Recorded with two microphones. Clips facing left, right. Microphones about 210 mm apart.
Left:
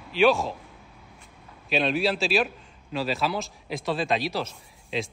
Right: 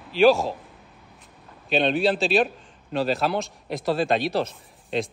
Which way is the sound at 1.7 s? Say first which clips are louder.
Right 3 dB; centre (ahead or behind).